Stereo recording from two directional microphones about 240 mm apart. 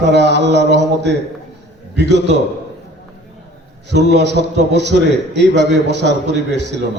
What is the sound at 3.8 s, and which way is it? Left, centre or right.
A man's voice, right.